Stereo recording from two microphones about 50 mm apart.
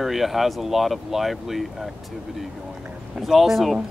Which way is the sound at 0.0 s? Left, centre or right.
Centre.